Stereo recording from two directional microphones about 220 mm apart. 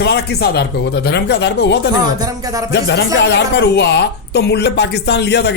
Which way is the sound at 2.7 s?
50° left (ahead or behind).